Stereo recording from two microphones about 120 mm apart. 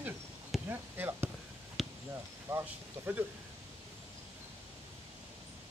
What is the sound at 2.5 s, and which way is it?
Speech, 15° right (ahead or behind).